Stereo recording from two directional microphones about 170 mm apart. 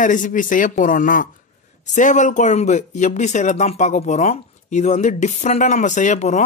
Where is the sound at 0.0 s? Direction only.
50° left (ahead or behind).